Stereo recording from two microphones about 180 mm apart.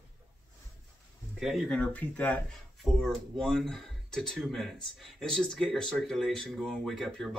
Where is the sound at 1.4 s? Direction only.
Centre (ahead or behind).